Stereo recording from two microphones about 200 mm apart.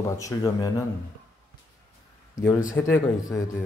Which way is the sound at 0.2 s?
15° left (ahead or behind).